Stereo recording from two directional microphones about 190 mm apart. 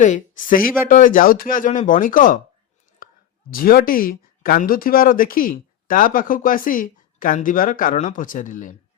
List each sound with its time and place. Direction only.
0.0 s speech: 40° left (ahead or behind)
3.0 s clicking: 50° left (ahead or behind)
3.5 s speech: 50° left (ahead or behind)